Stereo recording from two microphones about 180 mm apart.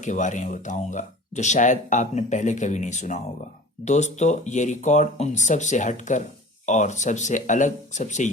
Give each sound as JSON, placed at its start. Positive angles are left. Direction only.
{"t": 0.0, "sound": "speech", "side_deg": 45}